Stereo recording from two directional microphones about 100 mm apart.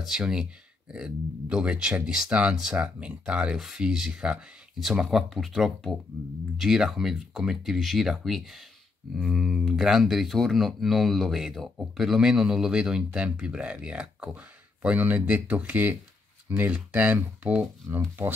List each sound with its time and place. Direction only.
0.0 s speech: 5° right (ahead or behind); by 18.3 s 20° right (ahead or behind)